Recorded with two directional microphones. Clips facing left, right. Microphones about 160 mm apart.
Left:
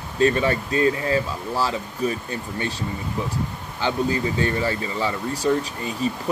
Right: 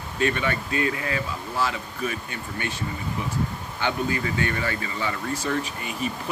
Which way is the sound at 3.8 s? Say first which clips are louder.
Left 3 dB; 30° left (ahead or behind).